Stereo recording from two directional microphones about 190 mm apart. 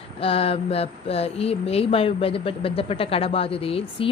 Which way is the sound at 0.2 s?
30° left (ahead or behind).